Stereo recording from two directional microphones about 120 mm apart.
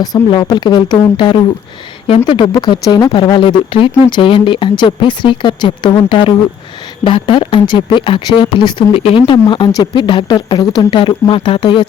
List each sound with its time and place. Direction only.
0.0 s speech: 35° left (ahead or behind)